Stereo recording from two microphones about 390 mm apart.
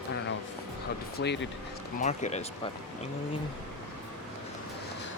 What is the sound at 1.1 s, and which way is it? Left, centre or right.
Speech, left.